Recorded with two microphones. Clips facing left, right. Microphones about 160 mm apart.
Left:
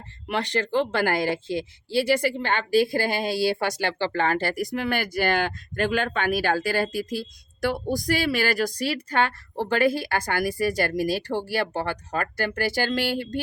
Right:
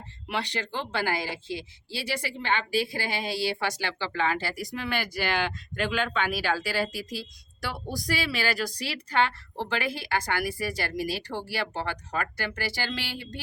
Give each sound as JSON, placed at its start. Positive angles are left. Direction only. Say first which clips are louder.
{"t": 0.3, "sound": "speech", "louder": "left 6 dB", "side_deg": 50}